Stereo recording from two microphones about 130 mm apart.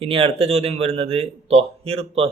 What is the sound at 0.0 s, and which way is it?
A man's voice, 45° right (ahead or behind).